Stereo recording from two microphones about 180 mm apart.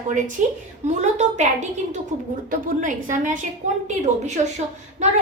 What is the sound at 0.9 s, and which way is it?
Speech, 40° right (ahead or behind).